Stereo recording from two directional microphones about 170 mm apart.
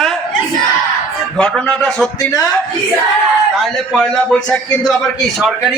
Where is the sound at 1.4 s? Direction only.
5° left (ahead or behind).